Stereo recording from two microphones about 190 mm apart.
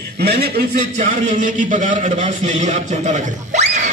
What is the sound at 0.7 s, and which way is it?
A man's voice, 40° right (ahead or behind).